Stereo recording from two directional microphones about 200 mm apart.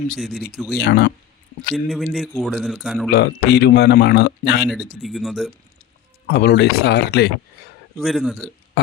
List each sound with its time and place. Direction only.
0.2 s speech: centre (ahead or behind)
0.8 s speech: 55° left (ahead or behind)
1.7 s speech: centre (ahead or behind)
3.1 s speech: 55° left (ahead or behind)
4.6 s speech: centre (ahead or behind)
6.2 s speech: 55° left (ahead or behind)
7.9 s speech: centre (ahead or behind)